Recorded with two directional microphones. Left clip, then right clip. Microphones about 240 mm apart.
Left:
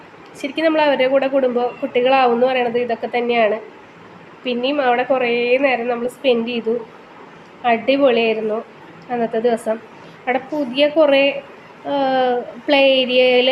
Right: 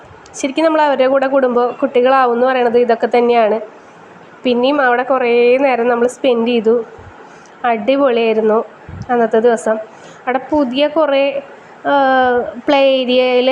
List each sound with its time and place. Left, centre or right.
0.3 s a woman's voice: right